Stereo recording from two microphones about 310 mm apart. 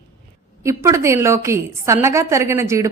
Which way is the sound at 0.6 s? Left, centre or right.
Centre.